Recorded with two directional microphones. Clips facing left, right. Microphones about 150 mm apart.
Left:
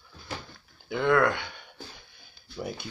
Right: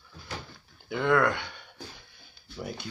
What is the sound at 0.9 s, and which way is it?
Speech, centre (ahead or behind).